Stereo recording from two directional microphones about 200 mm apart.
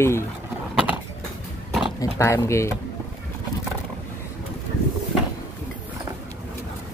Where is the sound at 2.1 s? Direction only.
15° left (ahead or behind).